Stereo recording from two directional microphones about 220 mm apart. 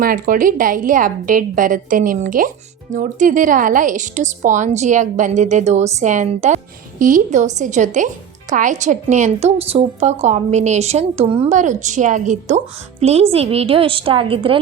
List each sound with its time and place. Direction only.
0.0 s a woman's voice: 40° right (ahead or behind); by 14.6 s 25° right (ahead or behind)